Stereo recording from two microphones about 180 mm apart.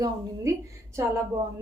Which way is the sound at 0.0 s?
15° right (ahead or behind).